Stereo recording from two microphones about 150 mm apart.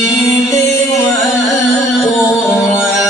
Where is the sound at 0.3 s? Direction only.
20° left (ahead or behind).